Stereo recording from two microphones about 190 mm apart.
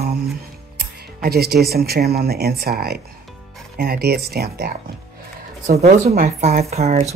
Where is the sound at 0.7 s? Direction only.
55° right (ahead or behind).